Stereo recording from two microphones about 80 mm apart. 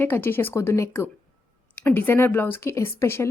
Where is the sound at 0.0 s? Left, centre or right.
Left.